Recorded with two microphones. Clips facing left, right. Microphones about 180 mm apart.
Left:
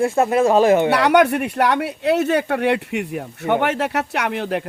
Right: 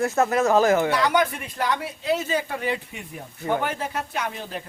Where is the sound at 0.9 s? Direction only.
70° left (ahead or behind).